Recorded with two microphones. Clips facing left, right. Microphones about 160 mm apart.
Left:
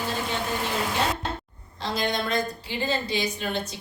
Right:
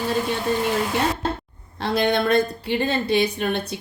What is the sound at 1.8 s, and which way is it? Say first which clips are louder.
Speech: right 7 dB; 60° right (ahead or behind).